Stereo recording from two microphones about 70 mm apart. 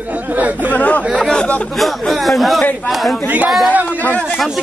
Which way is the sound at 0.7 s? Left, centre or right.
Left.